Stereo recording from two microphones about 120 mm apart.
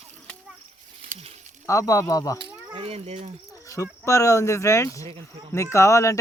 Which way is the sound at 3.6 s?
25° left (ahead or behind).